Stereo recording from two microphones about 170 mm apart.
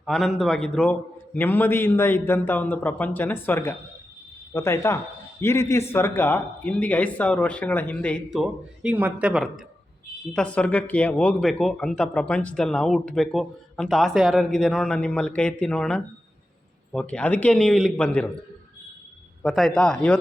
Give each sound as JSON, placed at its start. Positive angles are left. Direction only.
{"t": 0.0, "sound": "a man's voice", "side_deg": 0}
{"t": 10.3, "sound": "a man's voice", "side_deg": 5}
{"t": 19.4, "sound": "speech", "side_deg": 0}